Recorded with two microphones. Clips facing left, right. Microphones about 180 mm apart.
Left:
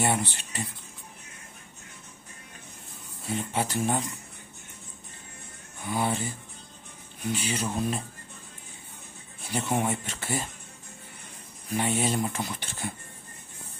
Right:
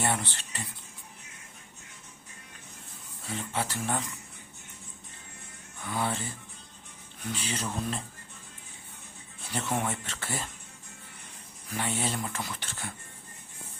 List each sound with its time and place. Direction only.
0.0 s speech: 10° left (ahead or behind)
3.2 s speech: 15° left (ahead or behind)
5.8 s speech: 15° left (ahead or behind)
7.3 s speech: 10° left (ahead or behind)
9.4 s speech: 10° left (ahead or behind)
11.7 s speech: 15° left (ahead or behind)